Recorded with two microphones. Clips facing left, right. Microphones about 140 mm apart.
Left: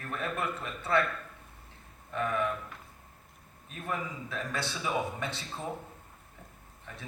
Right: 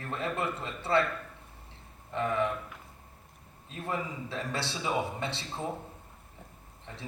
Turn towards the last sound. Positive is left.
turn(degrees=-25)  # may be behind; listen again after turning